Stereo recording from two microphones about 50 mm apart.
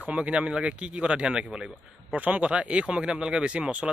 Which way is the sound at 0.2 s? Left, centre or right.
Right.